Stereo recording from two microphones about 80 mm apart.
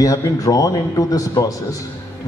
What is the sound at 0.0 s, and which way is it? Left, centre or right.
A man's voice, left.